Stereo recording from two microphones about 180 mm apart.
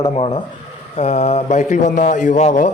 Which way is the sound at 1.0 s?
35° left (ahead or behind).